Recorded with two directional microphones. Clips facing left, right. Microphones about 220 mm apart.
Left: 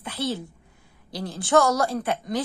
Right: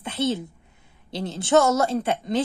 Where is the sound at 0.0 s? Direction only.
25° right (ahead or behind).